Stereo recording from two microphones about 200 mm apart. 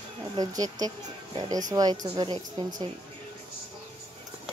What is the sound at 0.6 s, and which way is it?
Speech, 20° right (ahead or behind).